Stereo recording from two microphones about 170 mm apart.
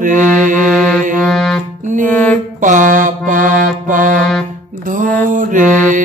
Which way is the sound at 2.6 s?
50° right (ahead or behind).